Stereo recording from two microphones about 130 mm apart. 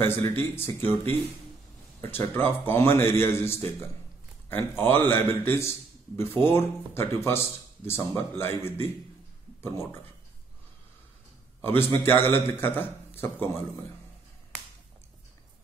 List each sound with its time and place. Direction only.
0.0 s a man's voice: 15° left (ahead or behind)
11.6 s a man's voice: 20° left (ahead or behind)